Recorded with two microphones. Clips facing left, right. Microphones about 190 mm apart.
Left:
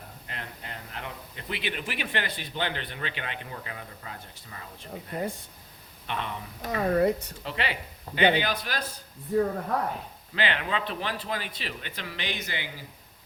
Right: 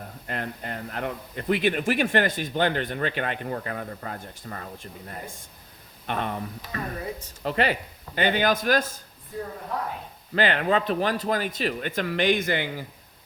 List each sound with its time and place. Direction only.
0.3 s a man's voice: 50° right (ahead or behind)
6.1 s a man's voice: 45° right (ahead or behind)
6.6 s speech: 65° left (ahead or behind)
7.4 s a man's voice: 45° right (ahead or behind)
10.3 s a man's voice: 45° right (ahead or behind)